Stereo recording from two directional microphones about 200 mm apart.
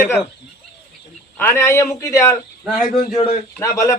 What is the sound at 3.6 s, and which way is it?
Speech, 15° left (ahead or behind).